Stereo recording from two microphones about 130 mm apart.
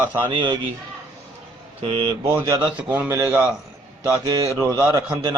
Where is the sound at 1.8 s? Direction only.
50° right (ahead or behind).